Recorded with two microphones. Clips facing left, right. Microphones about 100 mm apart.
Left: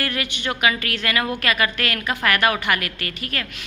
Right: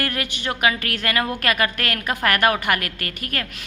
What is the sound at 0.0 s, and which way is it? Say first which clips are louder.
A woman's voice: even; 40° right (ahead or behind).